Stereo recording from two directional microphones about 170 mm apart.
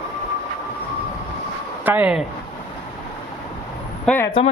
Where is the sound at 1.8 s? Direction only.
10° right (ahead or behind).